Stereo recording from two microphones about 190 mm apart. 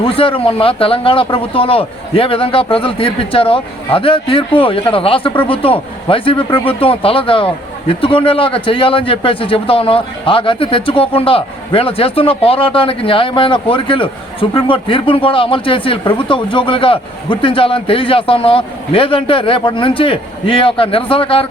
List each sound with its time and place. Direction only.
0.0 s speech: 30° left (ahead or behind)